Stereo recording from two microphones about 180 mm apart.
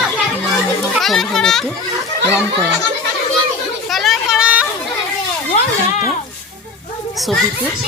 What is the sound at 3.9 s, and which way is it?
Children playing, centre (ahead or behind).